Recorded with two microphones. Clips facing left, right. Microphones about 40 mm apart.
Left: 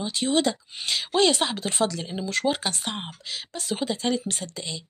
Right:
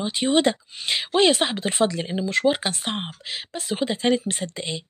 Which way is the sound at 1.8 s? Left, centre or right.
Right.